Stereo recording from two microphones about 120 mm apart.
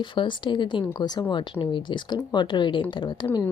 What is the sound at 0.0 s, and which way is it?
A woman's voice, 45° left (ahead or behind).